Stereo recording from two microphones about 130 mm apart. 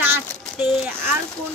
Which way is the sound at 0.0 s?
15° right (ahead or behind).